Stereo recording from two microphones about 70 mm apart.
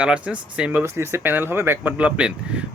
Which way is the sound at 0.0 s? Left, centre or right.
Centre.